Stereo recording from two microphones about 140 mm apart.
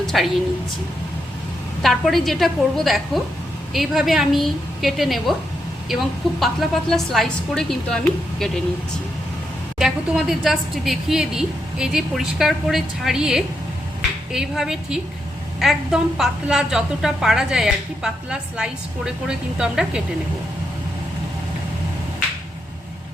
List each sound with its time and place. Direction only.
0.0 s a sound: centre (ahead or behind)
1.8 s a woman's voice: centre (ahead or behind)
9.7 s a woman's voice: 5° right (ahead or behind)